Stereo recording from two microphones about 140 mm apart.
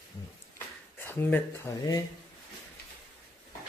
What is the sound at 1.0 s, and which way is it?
Speech, 15° left (ahead or behind).